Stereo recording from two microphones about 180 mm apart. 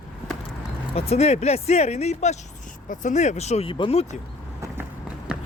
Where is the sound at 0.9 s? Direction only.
35° left (ahead or behind).